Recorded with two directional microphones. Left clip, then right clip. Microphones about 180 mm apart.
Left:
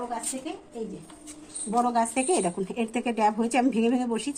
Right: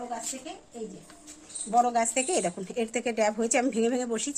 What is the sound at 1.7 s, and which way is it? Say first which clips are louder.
A woman's voice: right 1 dB; 40° right (ahead or behind).